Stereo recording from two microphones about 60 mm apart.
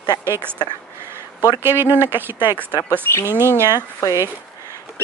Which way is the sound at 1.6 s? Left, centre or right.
Right.